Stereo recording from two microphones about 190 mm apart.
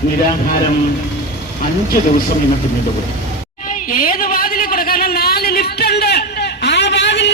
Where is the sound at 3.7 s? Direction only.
45° left (ahead or behind).